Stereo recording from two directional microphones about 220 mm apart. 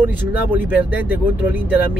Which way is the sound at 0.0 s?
10° right (ahead or behind).